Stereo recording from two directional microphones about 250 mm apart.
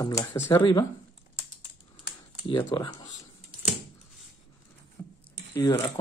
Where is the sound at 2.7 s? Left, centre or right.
Centre.